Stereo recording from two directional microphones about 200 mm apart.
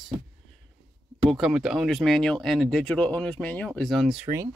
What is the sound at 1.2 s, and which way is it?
Speech, centre (ahead or behind).